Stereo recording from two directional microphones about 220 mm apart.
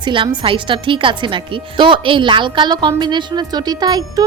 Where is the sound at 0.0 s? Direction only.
20° right (ahead or behind).